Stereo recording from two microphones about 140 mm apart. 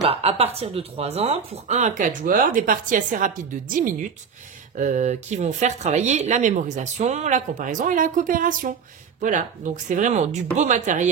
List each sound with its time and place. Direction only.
0.0 s a woman's voice: 45° right (ahead or behind); by 3.9 s 70° right (ahead or behind)
4.7 s speech: 60° right (ahead or behind)